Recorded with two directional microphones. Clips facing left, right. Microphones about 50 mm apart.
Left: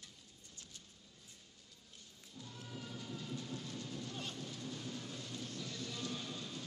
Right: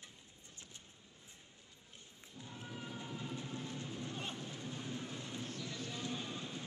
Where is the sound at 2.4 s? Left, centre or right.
Right.